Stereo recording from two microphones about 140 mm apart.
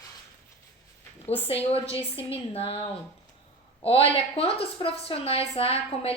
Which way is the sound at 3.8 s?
40° left (ahead or behind).